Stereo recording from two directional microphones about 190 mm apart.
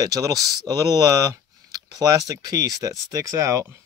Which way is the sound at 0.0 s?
20° right (ahead or behind).